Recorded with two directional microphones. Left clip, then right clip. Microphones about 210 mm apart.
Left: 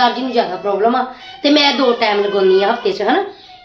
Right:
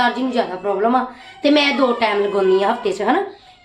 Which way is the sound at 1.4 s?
20° right (ahead or behind).